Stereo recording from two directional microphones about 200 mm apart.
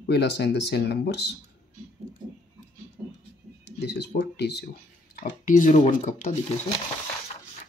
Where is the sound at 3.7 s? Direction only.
60° left (ahead or behind).